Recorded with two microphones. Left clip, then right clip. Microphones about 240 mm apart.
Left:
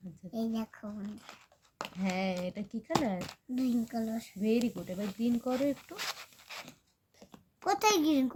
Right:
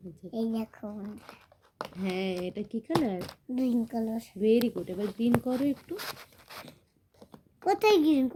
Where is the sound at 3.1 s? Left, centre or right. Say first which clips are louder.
Right 3 dB; centre.